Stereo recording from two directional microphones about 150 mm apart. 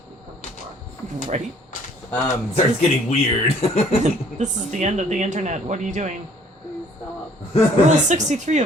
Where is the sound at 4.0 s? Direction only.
50° right (ahead or behind).